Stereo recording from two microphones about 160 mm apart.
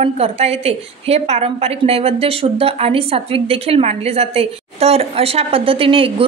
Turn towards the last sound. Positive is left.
turn(degrees=-35)  # may be behind; listen again after turning